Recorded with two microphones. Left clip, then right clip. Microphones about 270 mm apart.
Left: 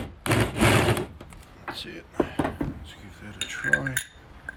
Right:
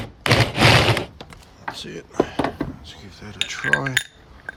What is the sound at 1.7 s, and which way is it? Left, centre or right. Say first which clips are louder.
Speech: right 5 dB; right.